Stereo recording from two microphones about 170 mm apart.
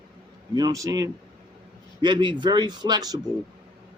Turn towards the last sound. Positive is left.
turn(degrees=-25)  # may be behind; listen again after turning